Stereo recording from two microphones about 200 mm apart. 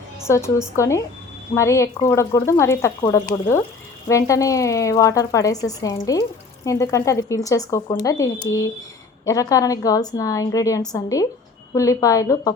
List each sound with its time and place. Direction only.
0.3 s a woman's voice: 15° left (ahead or behind)